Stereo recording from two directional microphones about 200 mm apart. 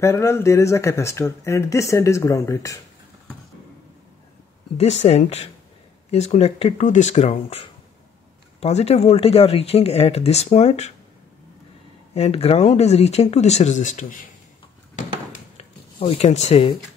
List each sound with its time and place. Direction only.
0.0 s speech: 15° left (ahead or behind)
5.0 s speech: 30° left (ahead or behind)
12.1 s speech: 30° left (ahead or behind)
15.3 s drawer open or close: 30° left (ahead or behind)